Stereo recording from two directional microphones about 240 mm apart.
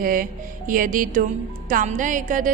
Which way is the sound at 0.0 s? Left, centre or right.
Right.